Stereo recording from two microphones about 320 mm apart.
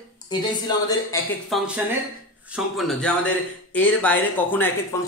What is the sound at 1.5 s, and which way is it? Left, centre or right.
Speech, centre.